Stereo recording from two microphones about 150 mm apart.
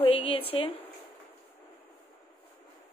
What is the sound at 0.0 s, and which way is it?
Speech, 40° left (ahead or behind).